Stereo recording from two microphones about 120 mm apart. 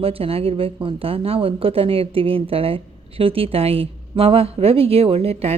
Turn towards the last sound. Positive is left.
turn(degrees=-55)  # may be behind; listen again after turning